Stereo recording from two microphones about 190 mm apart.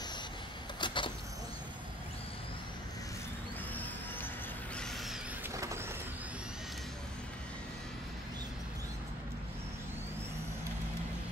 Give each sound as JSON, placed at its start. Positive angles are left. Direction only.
{"t": 0.7, "sound": "vehicle", "side_deg": 25}
{"t": 5.5, "sound": "vehicle", "side_deg": -15}